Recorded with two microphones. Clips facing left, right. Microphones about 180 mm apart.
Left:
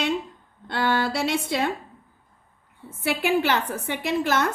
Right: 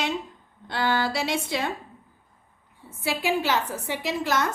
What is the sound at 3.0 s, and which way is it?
A woman's voice, 60° left (ahead or behind).